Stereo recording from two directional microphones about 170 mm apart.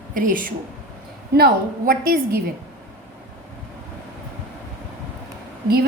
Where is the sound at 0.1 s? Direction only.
55° right (ahead or behind).